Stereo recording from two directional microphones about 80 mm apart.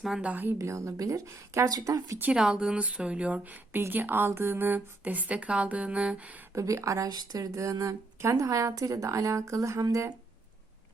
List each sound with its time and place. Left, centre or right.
0.2 s a woman's voice: right
0.6 s speech: right
2.3 s speech: centre
6.5 s speech: right